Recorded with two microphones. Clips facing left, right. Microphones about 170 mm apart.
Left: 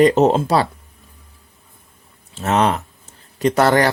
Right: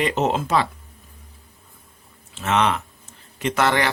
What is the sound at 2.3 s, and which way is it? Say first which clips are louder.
Speech: left 3 dB; 40° left (ahead or behind).